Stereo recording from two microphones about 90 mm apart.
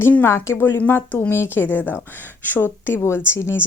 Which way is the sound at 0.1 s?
25° left (ahead or behind).